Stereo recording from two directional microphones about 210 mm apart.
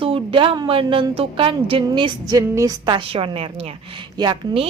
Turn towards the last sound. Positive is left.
turn(degrees=-20)  # may be behind; listen again after turning